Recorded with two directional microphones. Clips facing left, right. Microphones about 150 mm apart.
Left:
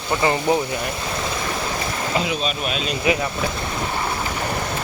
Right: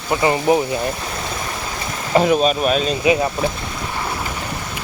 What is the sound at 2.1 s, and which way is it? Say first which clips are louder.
Speech: right 11 dB; 45° right (ahead or behind).